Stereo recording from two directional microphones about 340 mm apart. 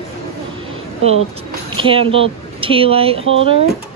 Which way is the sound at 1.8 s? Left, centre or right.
Centre.